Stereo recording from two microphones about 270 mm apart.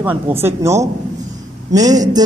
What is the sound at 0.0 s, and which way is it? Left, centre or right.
A man's voice, centre.